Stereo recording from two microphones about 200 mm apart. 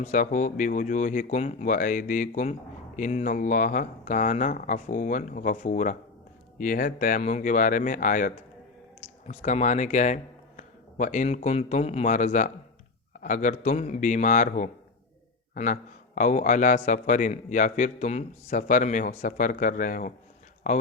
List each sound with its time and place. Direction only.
0.0 s speech: 40° left (ahead or behind)